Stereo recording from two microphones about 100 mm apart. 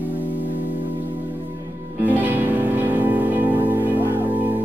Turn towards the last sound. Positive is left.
turn(degrees=-15)  # may be behind; listen again after turning